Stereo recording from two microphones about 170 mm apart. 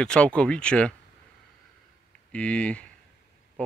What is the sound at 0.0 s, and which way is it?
Speech, 5° left (ahead or behind).